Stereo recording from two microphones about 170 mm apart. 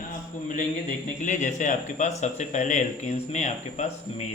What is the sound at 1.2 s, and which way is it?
Speech, 45° left (ahead or behind).